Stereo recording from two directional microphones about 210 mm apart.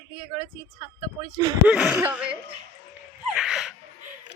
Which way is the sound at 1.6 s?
5° right (ahead or behind).